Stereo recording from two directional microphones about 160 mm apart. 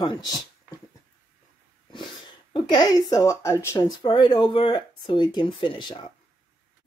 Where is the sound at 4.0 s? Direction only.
30° left (ahead or behind).